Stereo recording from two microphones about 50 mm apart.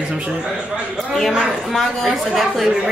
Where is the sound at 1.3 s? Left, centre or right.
Centre.